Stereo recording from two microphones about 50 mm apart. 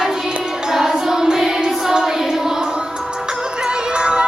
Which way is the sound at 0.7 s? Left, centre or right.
Centre.